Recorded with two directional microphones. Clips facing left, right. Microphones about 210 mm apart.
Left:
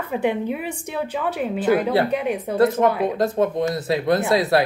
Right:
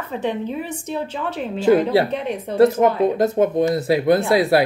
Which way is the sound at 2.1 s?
5° left (ahead or behind).